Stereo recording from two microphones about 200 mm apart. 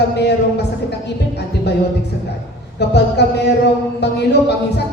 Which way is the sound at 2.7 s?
55° left (ahead or behind).